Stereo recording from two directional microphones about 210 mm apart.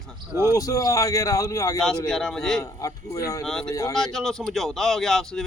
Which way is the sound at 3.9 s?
Centre (ahead or behind).